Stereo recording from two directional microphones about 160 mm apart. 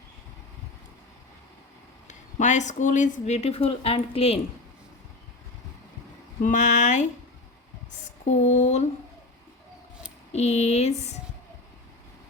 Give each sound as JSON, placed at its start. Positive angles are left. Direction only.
{"t": 2.0, "sound": "speech", "side_deg": 50}
{"t": 6.4, "sound": "speech", "side_deg": 50}
{"t": 7.9, "sound": "a sound", "side_deg": 50}
{"t": 10.3, "sound": "speech", "side_deg": 45}